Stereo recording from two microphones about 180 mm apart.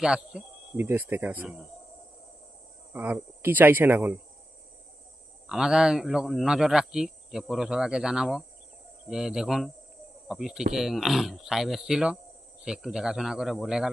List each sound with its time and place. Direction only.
0.0 s speech: 5° right (ahead or behind)
2.9 s speech: 10° right (ahead or behind)
5.5 s speech: 5° right (ahead or behind)